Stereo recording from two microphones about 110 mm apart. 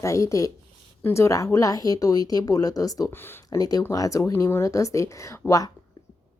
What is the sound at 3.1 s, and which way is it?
Speech, 20° left (ahead or behind).